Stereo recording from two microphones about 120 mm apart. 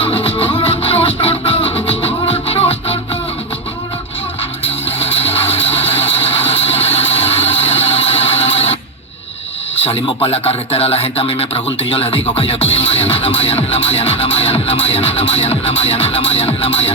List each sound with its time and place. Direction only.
0.0 s music: 45° left (ahead or behind)
4.6 s vehicle: 55° left (ahead or behind)
9.7 s speech: 50° left (ahead or behind)